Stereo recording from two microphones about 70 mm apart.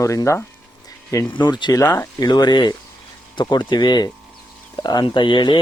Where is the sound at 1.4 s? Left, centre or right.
Left.